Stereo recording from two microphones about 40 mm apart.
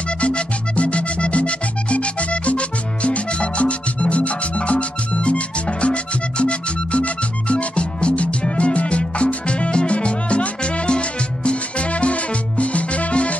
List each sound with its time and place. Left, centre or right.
0.2 s music: left